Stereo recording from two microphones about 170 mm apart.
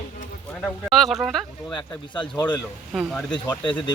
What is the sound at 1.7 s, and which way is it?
Speech, 25° left (ahead or behind).